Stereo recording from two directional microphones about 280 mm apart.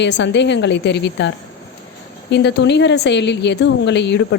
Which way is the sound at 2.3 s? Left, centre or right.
Left.